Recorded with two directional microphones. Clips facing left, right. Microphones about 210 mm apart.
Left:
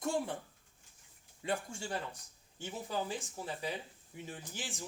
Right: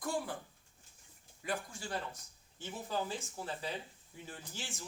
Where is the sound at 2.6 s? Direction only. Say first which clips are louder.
Even; 15° left (ahead or behind).